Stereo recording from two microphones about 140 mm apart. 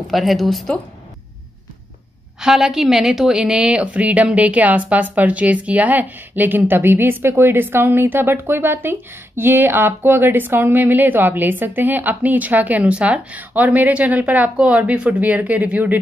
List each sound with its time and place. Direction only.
0.1 s a woman's voice: centre (ahead or behind)
2.4 s a woman's voice: 5° right (ahead or behind)